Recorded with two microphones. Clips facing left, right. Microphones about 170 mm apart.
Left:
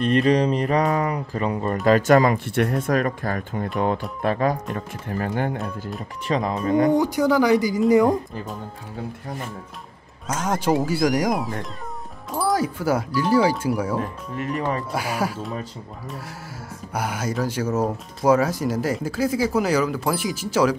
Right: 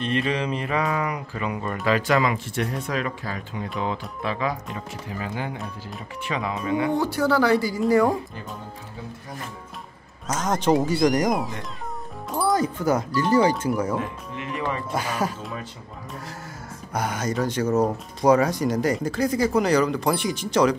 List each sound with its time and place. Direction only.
0.0 s speech: 40° left (ahead or behind)
1.9 s speech: 45° left (ahead or behind)
6.2 s speech: 35° left (ahead or behind)
7.0 s speech: 15° left (ahead or behind)
10.2 s speech: 10° left (ahead or behind)
13.9 s speech: 45° left (ahead or behind)
14.9 s speech: 10° left (ahead or behind)
16.9 s speech: 5° left (ahead or behind)